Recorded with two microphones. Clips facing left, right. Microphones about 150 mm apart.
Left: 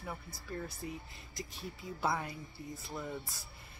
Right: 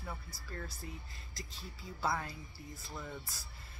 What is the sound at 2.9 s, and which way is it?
Speech, 10° left (ahead or behind).